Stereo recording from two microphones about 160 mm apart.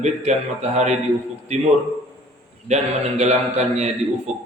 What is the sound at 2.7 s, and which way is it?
A man's voice, 45° right (ahead or behind).